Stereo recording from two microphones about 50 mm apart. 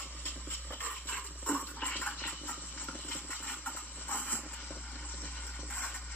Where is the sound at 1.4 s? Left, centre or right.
Left.